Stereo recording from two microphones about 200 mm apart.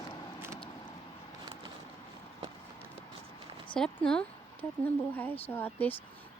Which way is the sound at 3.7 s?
5° left (ahead or behind).